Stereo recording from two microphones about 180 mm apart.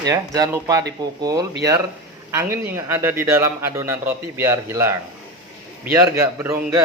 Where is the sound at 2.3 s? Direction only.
15° right (ahead or behind).